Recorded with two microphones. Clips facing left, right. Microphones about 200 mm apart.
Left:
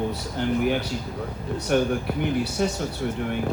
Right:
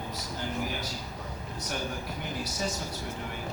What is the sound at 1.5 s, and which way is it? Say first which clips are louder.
Speech: left 14 dB; 65° left (ahead or behind).